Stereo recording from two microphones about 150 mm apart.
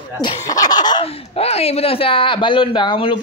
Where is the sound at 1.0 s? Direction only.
40° left (ahead or behind).